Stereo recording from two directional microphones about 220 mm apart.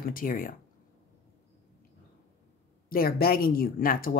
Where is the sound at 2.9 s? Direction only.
45° left (ahead or behind).